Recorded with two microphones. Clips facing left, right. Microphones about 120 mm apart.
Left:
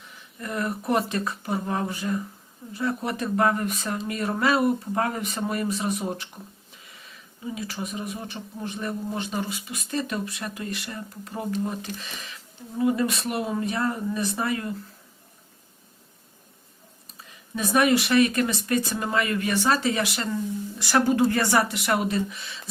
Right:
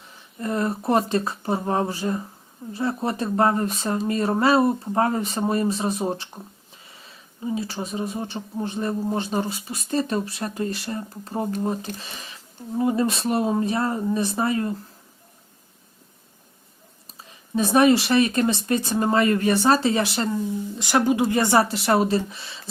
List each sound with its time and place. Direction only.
0.1 s speech: 30° right (ahead or behind)
17.5 s speech: 30° right (ahead or behind)